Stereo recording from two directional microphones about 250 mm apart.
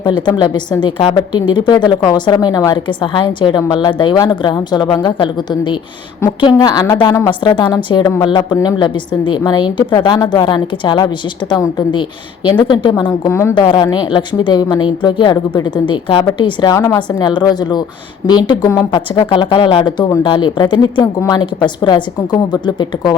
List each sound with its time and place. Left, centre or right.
0.0 s a woman's voice: centre